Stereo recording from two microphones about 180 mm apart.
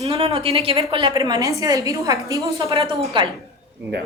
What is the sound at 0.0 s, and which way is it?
A woman's voice, 35° right (ahead or behind).